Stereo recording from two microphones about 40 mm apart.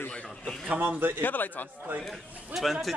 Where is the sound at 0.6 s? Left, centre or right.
Right.